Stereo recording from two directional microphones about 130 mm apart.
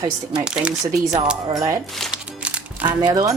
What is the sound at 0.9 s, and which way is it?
Speech, 30° right (ahead or behind).